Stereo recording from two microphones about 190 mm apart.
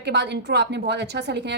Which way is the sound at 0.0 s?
65° right (ahead or behind).